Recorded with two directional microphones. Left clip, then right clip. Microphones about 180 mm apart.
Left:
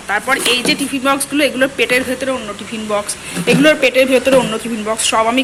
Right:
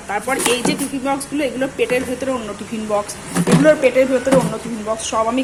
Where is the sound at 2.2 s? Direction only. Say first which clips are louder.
Left 3 dB; 5° right (ahead or behind).